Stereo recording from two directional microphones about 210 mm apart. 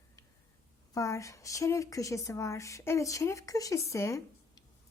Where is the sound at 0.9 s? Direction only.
15° left (ahead or behind).